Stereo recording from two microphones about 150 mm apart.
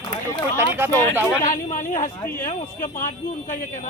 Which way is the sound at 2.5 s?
60° left (ahead or behind).